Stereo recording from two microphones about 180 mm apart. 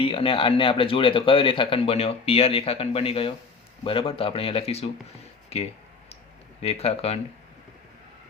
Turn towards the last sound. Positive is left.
turn(degrees=35)  # may be behind; listen again after turning